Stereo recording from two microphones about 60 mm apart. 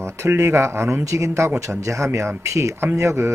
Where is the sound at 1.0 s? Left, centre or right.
Right.